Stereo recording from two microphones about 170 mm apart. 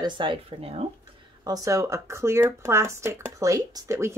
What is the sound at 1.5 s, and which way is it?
Speech, 20° right (ahead or behind).